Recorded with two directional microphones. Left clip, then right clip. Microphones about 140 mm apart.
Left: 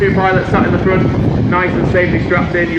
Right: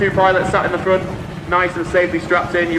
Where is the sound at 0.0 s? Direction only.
50° right (ahead or behind).